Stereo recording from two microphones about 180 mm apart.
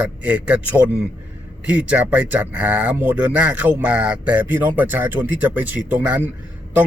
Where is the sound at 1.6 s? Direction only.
10° right (ahead or behind).